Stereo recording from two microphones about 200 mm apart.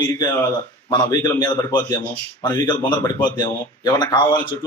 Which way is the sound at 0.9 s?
20° left (ahead or behind).